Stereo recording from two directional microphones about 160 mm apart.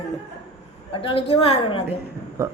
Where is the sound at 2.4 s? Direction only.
15° right (ahead or behind).